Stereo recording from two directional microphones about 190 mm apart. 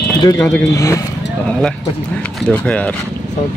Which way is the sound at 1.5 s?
5° left (ahead or behind).